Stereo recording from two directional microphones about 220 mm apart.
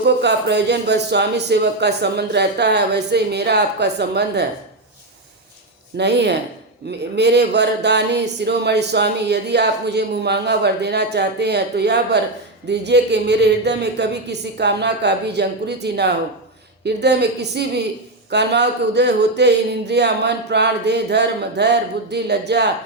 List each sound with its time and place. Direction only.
0.0 s speech: 50° right (ahead or behind)
6.0 s speech: 50° right (ahead or behind)